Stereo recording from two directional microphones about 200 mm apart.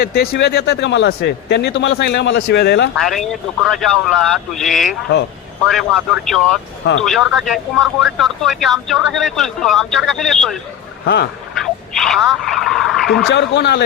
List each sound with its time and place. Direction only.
0.0 s speech: 50° left (ahead or behind)
2.9 s speech: centre (ahead or behind)
11.0 s speech: 55° left (ahead or behind)
11.5 s telephone: centre (ahead or behind)
13.3 s speech: 60° left (ahead or behind)